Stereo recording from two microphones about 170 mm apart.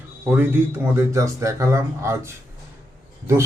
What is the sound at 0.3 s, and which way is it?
Speech, 10° right (ahead or behind).